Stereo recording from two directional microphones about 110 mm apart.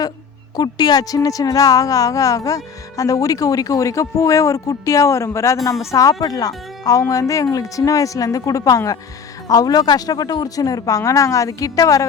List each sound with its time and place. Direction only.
0.5 s speech: 40° left (ahead or behind)